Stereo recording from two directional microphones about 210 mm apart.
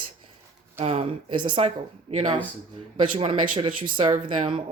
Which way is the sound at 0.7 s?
30° right (ahead or behind).